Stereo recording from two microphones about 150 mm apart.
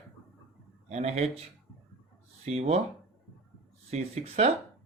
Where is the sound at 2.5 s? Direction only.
45° right (ahead or behind).